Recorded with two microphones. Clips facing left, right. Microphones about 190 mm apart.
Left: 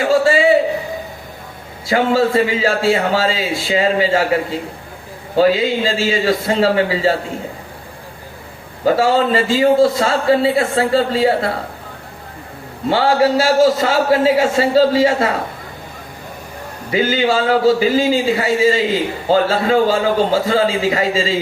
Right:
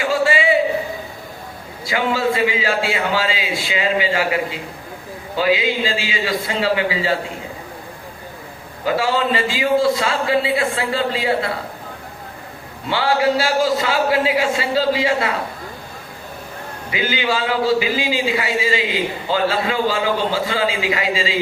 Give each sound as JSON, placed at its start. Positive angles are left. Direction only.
{"t": 0.0, "sound": "a sound", "side_deg": 40}
{"t": 1.9, "sound": "a man's voice", "side_deg": 45}
{"t": 5.4, "sound": "a man's voice", "side_deg": 40}
{"t": 8.8, "sound": "a man's voice", "side_deg": 40}
{"t": 12.9, "sound": "a man's voice", "side_deg": 40}
{"t": 16.9, "sound": "a man's voice", "side_deg": 45}